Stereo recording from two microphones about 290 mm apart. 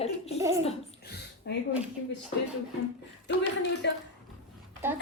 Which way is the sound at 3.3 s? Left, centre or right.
Left.